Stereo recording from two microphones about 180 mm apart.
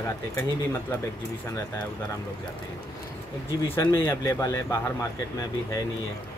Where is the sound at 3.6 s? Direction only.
15° left (ahead or behind).